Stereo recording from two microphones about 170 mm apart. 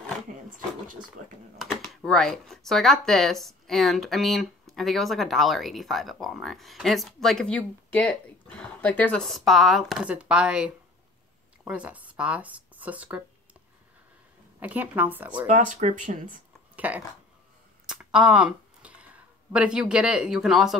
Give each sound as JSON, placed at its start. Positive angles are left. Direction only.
{"t": 1.6, "sound": "speech", "side_deg": 0}
{"t": 14.6, "sound": "speech", "side_deg": -10}
{"t": 15.4, "sound": "speech", "side_deg": -50}
{"t": 16.7, "sound": "a sound", "side_deg": -10}
{"t": 17.8, "sound": "speech", "side_deg": -5}